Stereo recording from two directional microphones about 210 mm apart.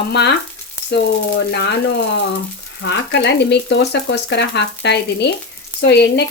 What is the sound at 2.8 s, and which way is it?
Speech, 55° left (ahead or behind).